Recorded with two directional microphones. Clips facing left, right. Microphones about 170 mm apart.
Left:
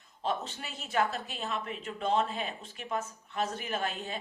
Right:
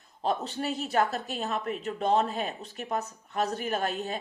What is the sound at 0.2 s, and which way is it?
Speech, 40° right (ahead or behind).